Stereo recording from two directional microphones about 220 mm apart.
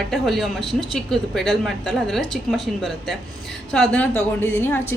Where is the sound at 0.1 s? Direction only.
Centre (ahead or behind).